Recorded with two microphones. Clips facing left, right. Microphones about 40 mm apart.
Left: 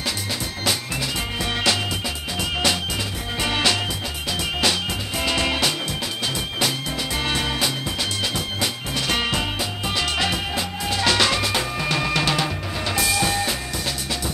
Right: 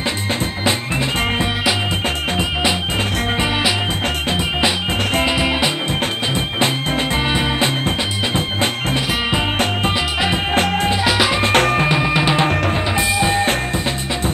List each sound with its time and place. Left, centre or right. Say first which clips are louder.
5.2 s music: right 1 dB; centre
10.5 s music: right 10 dB; right
11.1 s music: even; centre
11.5 s music: right 10 dB; right
11.9 s music: right 5 dB; right